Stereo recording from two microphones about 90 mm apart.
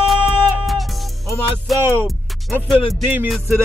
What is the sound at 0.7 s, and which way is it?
Music, centre (ahead or behind).